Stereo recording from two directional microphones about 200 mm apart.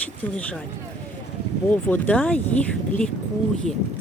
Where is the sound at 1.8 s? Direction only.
10° left (ahead or behind).